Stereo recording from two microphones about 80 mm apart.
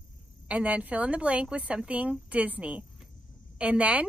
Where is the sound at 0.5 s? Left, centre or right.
Centre.